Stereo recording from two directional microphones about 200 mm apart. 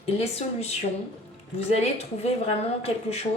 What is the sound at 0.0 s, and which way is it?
Speech, 30° left (ahead or behind).